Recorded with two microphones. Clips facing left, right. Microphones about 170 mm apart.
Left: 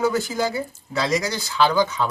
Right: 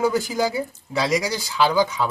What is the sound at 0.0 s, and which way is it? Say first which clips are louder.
Speech: right 1 dB; 10° right (ahead or behind).